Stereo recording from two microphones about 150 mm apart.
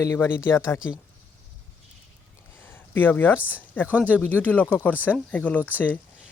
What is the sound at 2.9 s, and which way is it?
A woman's voice, 15° left (ahead or behind).